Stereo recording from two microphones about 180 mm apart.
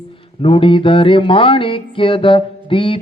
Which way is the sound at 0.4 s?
30° left (ahead or behind).